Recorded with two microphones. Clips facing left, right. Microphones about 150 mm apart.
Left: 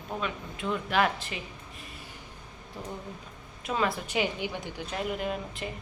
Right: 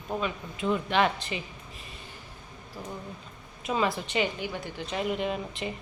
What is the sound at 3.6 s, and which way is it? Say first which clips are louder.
A woman's voice: right 1 dB; centre (ahead or behind).